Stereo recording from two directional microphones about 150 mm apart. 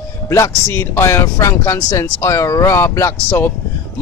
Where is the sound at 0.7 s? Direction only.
20° left (ahead or behind).